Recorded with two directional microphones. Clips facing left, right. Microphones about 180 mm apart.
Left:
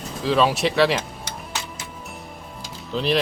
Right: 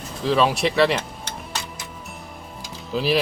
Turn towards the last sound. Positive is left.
turn(degrees=-5)  # may be behind; listen again after turning